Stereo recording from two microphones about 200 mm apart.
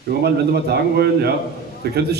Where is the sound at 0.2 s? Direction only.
55° right (ahead or behind).